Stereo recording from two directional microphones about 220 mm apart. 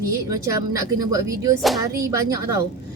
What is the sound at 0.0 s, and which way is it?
A woman's voice, 15° right (ahead or behind).